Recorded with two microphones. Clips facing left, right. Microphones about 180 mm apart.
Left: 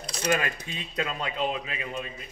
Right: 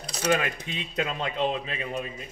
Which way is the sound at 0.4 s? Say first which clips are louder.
Right 1 dB; 20° right (ahead or behind).